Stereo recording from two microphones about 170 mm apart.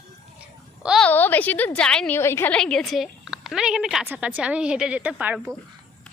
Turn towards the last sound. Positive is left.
turn(degrees=-10)  # may be behind; listen again after turning